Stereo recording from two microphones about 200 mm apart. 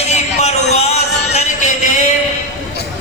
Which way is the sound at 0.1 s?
35° left (ahead or behind).